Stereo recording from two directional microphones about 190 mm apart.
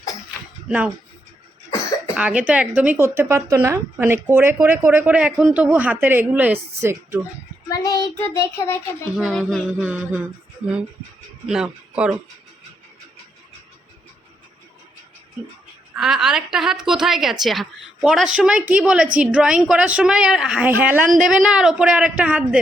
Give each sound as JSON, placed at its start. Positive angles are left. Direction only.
{"t": 2.1, "sound": "a woman's voice", "side_deg": -5}
{"t": 7.7, "sound": "child singing", "side_deg": 20}
{"t": 8.4, "sound": "speech", "side_deg": 15}
{"t": 9.1, "sound": "speech", "side_deg": 0}
{"t": 11.4, "sound": "speech", "side_deg": -5}
{"t": 16.0, "sound": "speech", "side_deg": -5}